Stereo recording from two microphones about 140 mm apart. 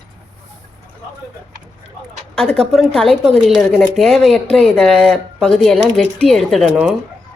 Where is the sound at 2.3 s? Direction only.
5° left (ahead or behind).